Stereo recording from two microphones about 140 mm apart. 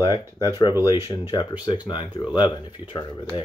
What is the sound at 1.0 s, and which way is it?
Speech, 30° left (ahead or behind).